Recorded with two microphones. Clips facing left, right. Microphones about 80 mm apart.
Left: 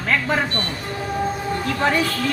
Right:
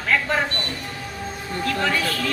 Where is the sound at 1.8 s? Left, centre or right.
Left.